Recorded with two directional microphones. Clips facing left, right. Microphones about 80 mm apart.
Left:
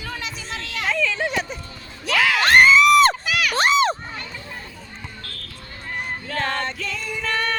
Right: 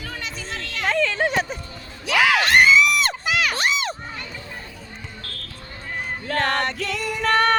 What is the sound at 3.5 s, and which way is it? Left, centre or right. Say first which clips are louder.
Crowd: left 6 dB; left.